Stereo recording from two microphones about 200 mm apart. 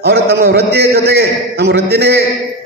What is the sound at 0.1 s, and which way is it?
A man's voice, 55° right (ahead or behind).